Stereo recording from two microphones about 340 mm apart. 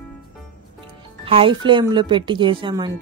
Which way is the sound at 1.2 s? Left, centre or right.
Centre.